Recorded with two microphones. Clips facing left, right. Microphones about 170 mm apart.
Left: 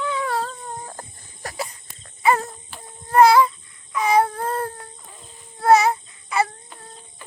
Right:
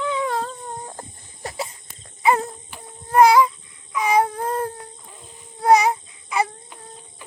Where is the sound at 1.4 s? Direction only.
25° right (ahead or behind).